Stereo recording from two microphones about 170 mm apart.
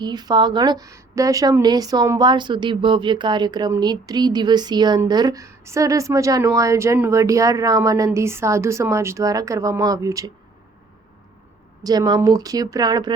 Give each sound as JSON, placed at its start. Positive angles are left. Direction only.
{"t": 0.0, "sound": "a woman's voice", "side_deg": -25}
{"t": 11.8, "sound": "a woman's voice", "side_deg": -25}